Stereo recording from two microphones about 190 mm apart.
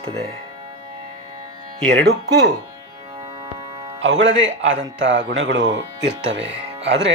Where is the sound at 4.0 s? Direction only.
70° right (ahead or behind).